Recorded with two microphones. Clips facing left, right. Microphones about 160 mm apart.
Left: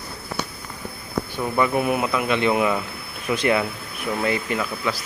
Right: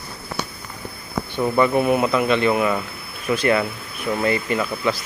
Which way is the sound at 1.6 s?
5° left (ahead or behind).